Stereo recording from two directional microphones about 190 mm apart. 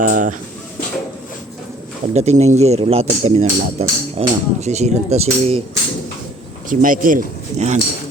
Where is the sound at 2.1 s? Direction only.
35° right (ahead or behind).